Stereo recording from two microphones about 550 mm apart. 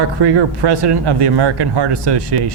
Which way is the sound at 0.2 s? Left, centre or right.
Right.